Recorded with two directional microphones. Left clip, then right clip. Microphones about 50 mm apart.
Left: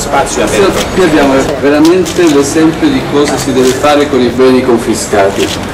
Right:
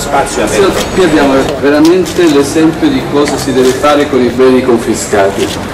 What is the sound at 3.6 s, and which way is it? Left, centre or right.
A man's voice, centre.